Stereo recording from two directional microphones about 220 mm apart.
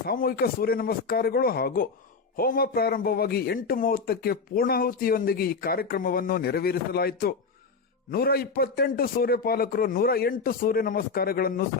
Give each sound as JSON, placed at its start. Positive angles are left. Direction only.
{"t": 0.1, "sound": "a man's voice", "side_deg": 40}